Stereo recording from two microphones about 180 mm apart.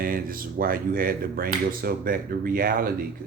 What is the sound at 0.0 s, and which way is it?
Speech, 55° right (ahead or behind).